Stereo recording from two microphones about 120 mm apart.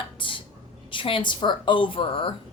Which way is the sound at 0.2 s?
45° left (ahead or behind).